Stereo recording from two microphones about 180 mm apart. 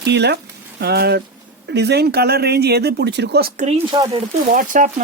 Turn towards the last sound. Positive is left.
turn(degrees=-50)  # may be behind; listen again after turning